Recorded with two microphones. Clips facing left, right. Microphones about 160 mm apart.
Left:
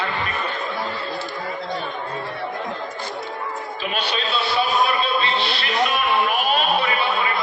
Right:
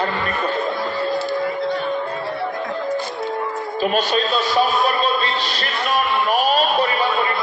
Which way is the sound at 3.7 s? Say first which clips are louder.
Right 8 dB; 45° right (ahead or behind).